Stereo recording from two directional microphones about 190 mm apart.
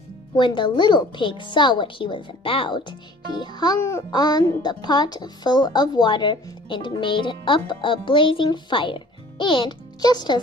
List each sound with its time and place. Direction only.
0.3 s speech: 25° left (ahead or behind)